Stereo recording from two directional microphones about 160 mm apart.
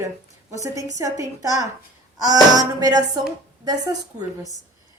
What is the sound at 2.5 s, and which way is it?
Speech, 25° right (ahead or behind).